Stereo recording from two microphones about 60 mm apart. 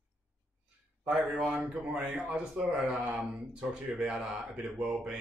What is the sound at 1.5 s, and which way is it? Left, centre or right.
Speech, right.